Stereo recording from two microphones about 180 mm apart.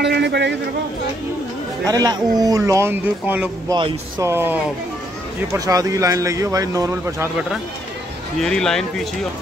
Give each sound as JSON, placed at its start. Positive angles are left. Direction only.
{"t": 0.0, "sound": "a man's voice", "side_deg": -70}
{"t": 1.9, "sound": "speech", "side_deg": -20}
{"t": 8.4, "sound": "a man's voice", "side_deg": 5}